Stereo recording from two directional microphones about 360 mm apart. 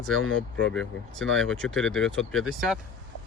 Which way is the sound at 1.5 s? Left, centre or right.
Centre.